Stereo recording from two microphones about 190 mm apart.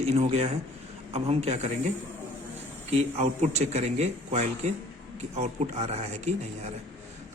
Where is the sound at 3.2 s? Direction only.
35° right (ahead or behind).